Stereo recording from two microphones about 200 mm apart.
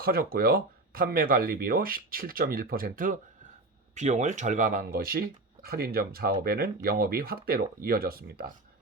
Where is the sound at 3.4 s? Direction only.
40° right (ahead or behind).